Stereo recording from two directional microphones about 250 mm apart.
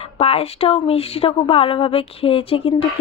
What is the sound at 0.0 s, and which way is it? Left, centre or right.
Speech, left.